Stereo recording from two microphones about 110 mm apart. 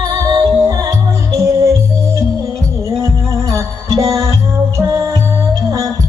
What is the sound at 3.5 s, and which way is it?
Music, 30° right (ahead or behind).